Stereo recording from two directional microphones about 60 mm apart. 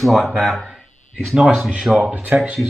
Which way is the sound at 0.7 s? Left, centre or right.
Centre.